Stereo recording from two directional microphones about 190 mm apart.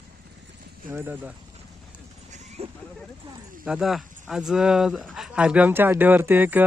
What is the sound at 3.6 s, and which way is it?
Speech, 5° right (ahead or behind).